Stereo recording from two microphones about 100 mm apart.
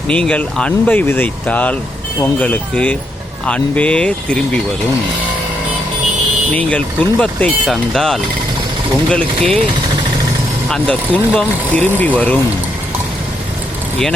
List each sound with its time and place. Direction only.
0.1 s speech: 10° left (ahead or behind)
6.5 s speech: 10° left (ahead or behind)
10.7 s speech: 10° left (ahead or behind)